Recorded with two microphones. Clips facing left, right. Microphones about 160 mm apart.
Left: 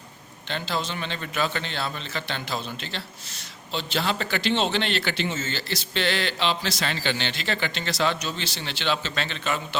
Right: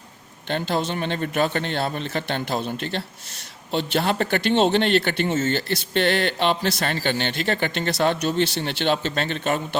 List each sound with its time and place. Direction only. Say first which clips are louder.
0.4 s a man's voice: right 5 dB; 55° right (ahead or behind)